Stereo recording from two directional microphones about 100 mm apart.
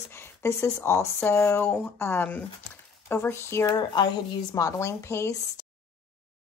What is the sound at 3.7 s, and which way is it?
Speech, 45° left (ahead or behind).